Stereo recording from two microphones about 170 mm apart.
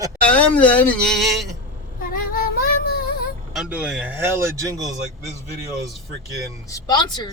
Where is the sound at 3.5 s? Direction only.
5° right (ahead or behind); by 5.0 s 20° right (ahead or behind).